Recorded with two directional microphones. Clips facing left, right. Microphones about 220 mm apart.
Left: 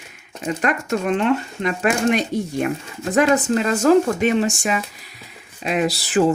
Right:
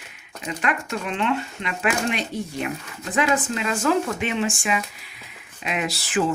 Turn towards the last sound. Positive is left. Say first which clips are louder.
# left 6 dB
turn(degrees=35)  # may be behind; listen again after turning